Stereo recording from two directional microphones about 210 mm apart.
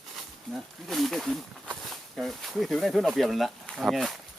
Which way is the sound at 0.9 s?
Centre (ahead or behind).